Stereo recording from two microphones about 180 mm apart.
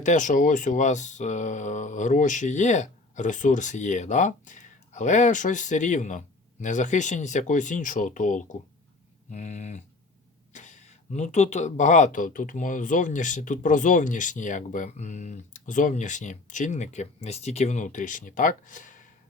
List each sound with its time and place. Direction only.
0.0 s speech: 45° left (ahead or behind)